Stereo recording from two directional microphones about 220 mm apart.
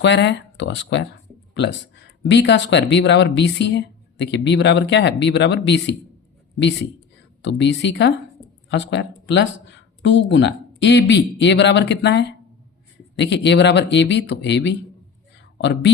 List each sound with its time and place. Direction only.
0.0 s speech: 55° left (ahead or behind)
2.2 s speech: 55° left (ahead or behind)
7.4 s speech: 55° left (ahead or behind)